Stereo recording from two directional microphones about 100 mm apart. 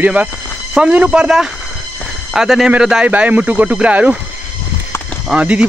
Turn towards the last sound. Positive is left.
turn(degrees=-10)  # may be behind; listen again after turning